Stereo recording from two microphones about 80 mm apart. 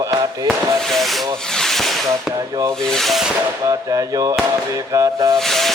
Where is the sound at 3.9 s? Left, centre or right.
Right.